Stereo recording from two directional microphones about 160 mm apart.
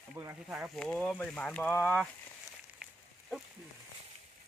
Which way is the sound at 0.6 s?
5° left (ahead or behind).